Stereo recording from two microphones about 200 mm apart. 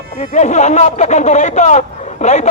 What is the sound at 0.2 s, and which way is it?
A man's voice, 35° left (ahead or behind).